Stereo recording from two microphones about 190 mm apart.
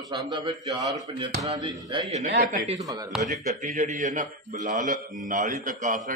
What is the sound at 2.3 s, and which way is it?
Speech, 55° right (ahead or behind).